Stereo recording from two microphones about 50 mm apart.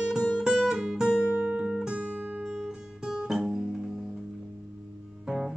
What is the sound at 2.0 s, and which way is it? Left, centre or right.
Music, right.